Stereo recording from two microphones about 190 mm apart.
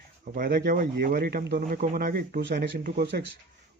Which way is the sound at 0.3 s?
45° right (ahead or behind).